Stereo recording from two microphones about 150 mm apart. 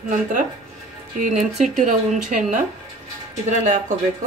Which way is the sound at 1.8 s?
65° right (ahead or behind).